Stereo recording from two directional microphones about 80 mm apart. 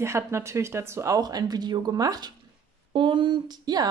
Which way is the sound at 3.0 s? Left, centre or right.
Right.